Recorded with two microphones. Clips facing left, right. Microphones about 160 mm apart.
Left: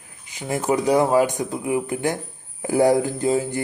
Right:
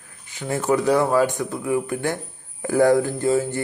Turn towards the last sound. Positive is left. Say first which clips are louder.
# right 1 dB
turn(degrees=15)  # may be behind; listen again after turning